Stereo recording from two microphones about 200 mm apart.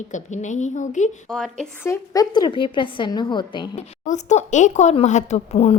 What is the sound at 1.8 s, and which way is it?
A woman's voice, 15° left (ahead or behind).